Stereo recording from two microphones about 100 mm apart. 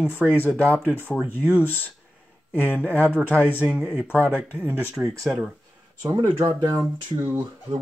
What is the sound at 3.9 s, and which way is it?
Speech, 15° right (ahead or behind).